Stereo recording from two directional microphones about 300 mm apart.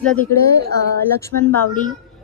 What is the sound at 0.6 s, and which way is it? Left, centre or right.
Speech, right.